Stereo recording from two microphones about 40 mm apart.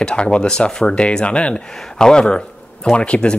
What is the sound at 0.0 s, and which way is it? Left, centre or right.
Speech, left.